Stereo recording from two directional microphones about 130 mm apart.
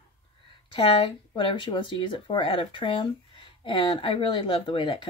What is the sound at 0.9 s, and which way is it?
Speech, 40° left (ahead or behind).